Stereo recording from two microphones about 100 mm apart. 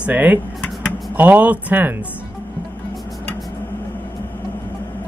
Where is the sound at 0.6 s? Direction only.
15° left (ahead or behind).